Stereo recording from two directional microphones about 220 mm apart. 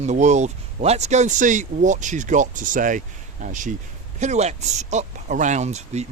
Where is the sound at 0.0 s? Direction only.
30° right (ahead or behind).